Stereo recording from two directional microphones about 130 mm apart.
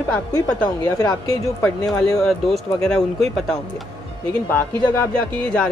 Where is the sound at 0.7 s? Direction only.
30° left (ahead or behind).